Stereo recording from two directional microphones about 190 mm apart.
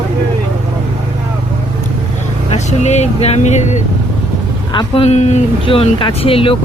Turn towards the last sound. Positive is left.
turn(degrees=30)  # may be behind; listen again after turning